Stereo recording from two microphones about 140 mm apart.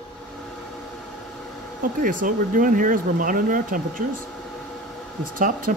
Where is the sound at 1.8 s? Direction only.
75° right (ahead or behind).